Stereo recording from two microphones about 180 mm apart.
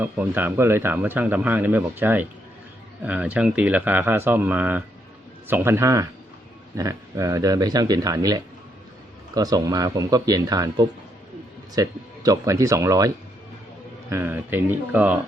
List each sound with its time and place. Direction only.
0.0 s speech: 10° right (ahead or behind)
14.1 s speech: 10° right (ahead or behind)